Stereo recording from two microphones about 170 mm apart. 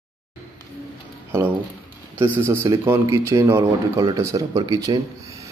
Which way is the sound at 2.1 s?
15° right (ahead or behind).